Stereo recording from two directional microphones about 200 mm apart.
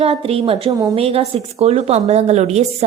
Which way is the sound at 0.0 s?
30° right (ahead or behind).